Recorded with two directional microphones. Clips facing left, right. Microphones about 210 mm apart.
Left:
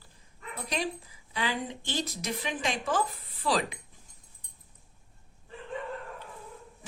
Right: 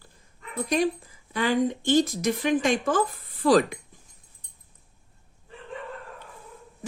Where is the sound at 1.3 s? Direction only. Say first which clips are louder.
Right 9 dB; 50° right (ahead or behind).